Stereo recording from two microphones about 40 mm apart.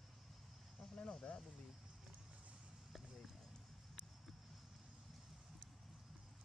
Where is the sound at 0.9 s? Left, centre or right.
Left.